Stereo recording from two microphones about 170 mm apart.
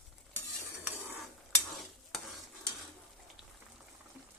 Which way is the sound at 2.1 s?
Centre (ahead or behind).